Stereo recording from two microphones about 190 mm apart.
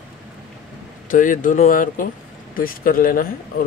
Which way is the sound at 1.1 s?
45° left (ahead or behind).